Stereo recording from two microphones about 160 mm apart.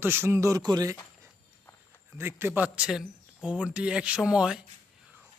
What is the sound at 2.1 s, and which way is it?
Speech, 15° right (ahead or behind).